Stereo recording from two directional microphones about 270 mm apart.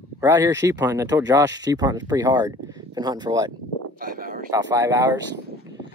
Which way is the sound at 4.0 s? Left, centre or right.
Right.